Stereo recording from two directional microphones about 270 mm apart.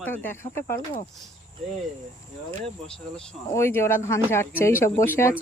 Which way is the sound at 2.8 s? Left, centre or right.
Centre.